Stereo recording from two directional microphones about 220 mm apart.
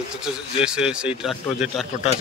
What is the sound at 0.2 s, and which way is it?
A man's voice, 5° right (ahead or behind).